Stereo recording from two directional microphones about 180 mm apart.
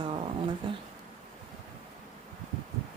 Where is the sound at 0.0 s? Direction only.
25° right (ahead or behind).